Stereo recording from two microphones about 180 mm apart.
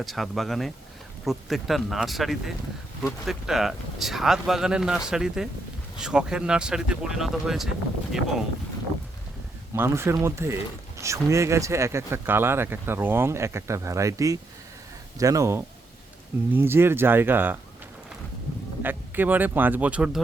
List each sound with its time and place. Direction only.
0.0 s speech: centre (ahead or behind)
9.7 s speech: 15° right (ahead or behind)
18.8 s speech: 10° right (ahead or behind)